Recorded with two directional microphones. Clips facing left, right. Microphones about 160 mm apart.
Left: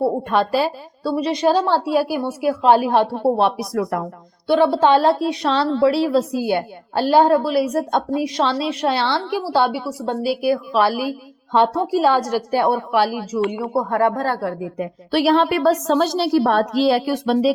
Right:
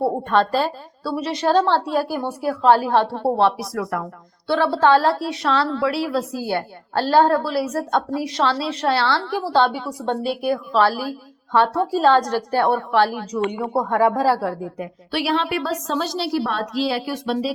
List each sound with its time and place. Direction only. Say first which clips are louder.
0.0 s a woman's voice: even; 10° left (ahead or behind)
15.1 s a woman's voice: left 6 dB; 45° left (ahead or behind)